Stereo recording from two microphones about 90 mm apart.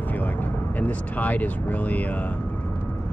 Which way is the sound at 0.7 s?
15° left (ahead or behind).